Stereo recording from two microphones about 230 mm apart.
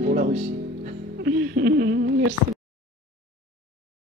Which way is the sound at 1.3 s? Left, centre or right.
Right.